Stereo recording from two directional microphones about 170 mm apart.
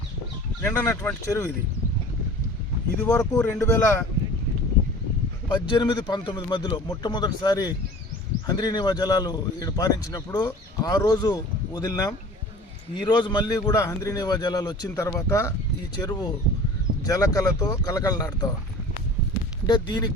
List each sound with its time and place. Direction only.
0.6 s speech: 10° left (ahead or behind)
3.0 s speech: 15° left (ahead or behind)
5.5 s a man's voice: 25° left (ahead or behind)
19.6 s a man's voice: 25° left (ahead or behind)